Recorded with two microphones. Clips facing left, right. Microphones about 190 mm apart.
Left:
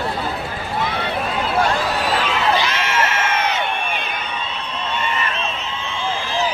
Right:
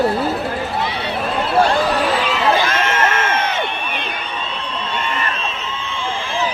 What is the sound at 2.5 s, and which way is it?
Crowd, 50° right (ahead or behind).